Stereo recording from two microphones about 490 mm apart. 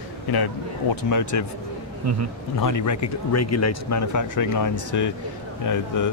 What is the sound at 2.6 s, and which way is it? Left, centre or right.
A man's voice, left.